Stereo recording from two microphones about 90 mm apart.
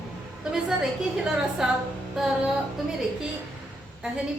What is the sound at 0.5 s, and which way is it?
A woman's voice, 5° right (ahead or behind).